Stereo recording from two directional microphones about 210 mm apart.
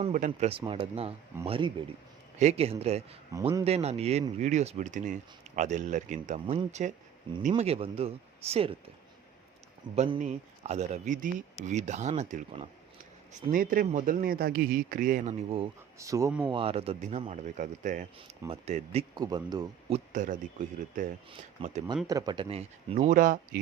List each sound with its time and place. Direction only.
0.0 s speech: 40° right (ahead or behind)
0.3 s speech: 30° right (ahead or behind)
9.9 s speech: 30° right (ahead or behind)
16.0 s speech: 15° right (ahead or behind)
16.5 s speech: 25° right (ahead or behind)
19.1 s speech: 20° right (ahead or behind)
20.1 s speech: 35° right (ahead or behind)
22.0 s speech: 20° right (ahead or behind); by 23.6 s 40° right (ahead or behind)